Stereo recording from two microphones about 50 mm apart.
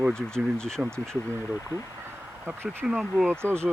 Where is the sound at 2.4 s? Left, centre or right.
Right.